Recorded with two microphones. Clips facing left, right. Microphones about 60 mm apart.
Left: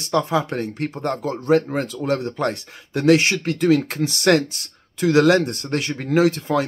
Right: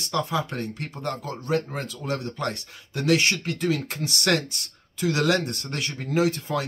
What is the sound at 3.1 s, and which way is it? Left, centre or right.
Speech, left.